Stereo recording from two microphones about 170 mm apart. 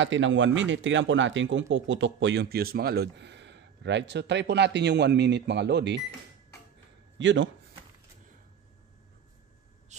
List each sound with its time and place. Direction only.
0.0 s speech: 90° right
7.2 s speech: 90° right